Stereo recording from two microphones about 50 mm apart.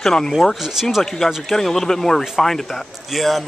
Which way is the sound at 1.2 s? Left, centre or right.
Centre.